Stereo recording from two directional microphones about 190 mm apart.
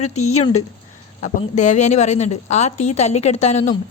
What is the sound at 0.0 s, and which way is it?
A woman's voice, 35° left (ahead or behind).